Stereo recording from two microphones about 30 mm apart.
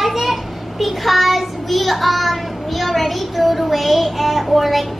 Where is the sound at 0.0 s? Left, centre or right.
Centre.